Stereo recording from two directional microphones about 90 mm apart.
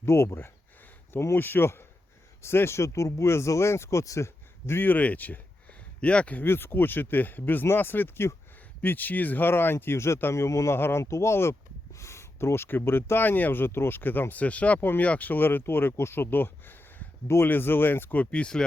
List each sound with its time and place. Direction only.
0.0 s speech: 30° left (ahead or behind); by 18.6 s 10° left (ahead or behind)